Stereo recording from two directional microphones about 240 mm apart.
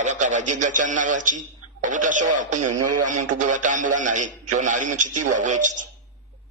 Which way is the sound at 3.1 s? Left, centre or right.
Right.